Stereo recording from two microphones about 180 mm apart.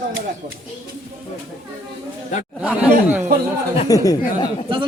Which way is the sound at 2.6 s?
5° right (ahead or behind).